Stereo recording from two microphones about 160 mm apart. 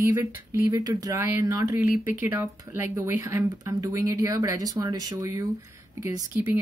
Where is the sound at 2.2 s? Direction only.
15° right (ahead or behind).